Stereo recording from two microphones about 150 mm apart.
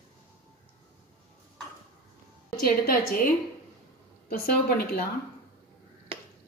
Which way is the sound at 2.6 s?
85° left.